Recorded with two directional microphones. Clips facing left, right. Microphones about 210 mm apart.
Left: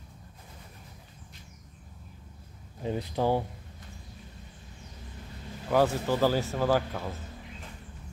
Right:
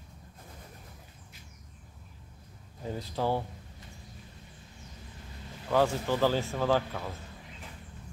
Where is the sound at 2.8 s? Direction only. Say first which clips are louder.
Left 4 dB; 20° left (ahead or behind).